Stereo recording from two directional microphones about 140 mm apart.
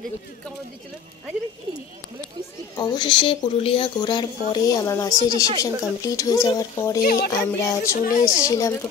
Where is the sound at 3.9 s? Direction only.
30° left (ahead or behind).